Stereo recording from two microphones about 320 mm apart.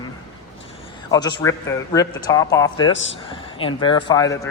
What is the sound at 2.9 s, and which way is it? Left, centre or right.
Speech, left.